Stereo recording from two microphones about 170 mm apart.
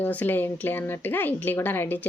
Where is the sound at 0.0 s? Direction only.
10° left (ahead or behind).